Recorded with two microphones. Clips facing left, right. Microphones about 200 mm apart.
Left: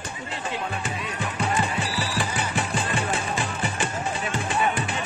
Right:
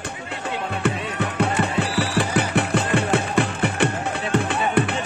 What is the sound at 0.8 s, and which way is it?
Music, 65° right (ahead or behind).